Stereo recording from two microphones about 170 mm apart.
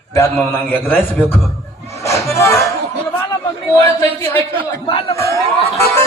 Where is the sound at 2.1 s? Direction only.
15° left (ahead or behind).